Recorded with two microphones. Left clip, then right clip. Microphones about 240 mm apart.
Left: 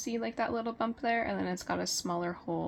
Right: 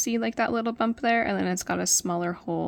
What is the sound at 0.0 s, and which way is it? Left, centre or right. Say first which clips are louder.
Speech: right 7 dB; right.